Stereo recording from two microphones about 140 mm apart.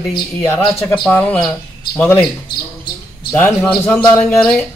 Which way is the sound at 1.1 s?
10° left (ahead or behind).